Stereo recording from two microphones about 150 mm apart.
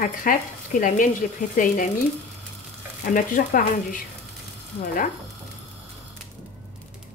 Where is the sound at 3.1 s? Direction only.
65° left (ahead or behind).